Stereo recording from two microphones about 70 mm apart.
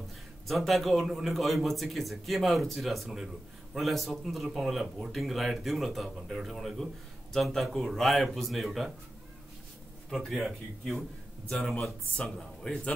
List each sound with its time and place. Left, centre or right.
0.5 s speech: centre
10.1 s speech: centre